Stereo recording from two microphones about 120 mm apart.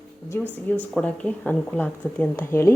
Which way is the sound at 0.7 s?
15° left (ahead or behind).